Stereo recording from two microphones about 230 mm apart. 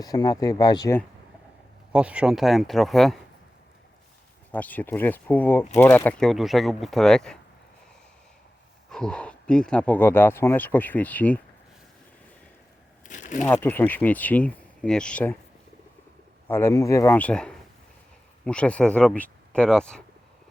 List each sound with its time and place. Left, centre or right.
0.0 s speech: centre
1.9 s speech: centre
4.5 s speech: centre
8.9 s speech: centre
13.1 s a sound: left
13.4 s speech: centre
16.5 s speech: centre